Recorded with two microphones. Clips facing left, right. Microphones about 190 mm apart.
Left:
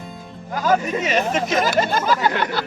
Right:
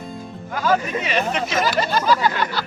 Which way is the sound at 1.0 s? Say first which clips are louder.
Left 2 dB; 45° left (ahead or behind).